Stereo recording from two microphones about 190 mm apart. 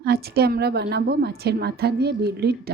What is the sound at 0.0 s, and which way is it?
A woman's voice, 55° right (ahead or behind).